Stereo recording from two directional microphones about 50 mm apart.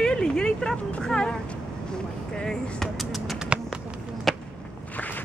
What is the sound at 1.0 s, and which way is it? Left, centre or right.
Speech, centre.